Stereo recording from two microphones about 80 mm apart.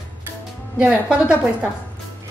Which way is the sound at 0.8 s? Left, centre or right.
Centre.